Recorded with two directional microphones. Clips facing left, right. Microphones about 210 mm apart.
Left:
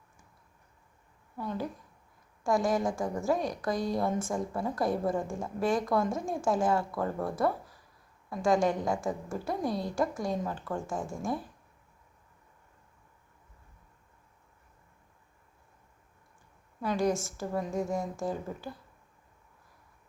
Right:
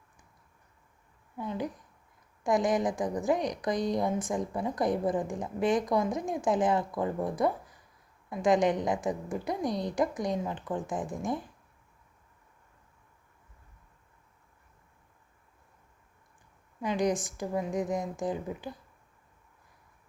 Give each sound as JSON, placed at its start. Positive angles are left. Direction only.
{"t": 1.4, "sound": "a woman's voice", "side_deg": -15}
{"t": 16.8, "sound": "a woman's voice", "side_deg": -15}